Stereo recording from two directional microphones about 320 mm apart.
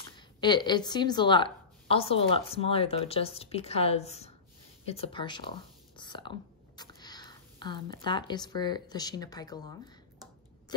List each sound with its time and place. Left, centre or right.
0.4 s a woman's voice: centre
5.9 s whispering: centre
6.8 s speech: centre